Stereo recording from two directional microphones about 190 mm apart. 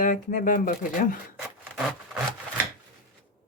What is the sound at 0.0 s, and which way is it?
Speech, 45° left (ahead or behind).